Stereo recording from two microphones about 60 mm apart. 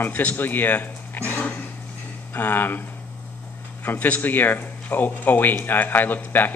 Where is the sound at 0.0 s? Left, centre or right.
Left.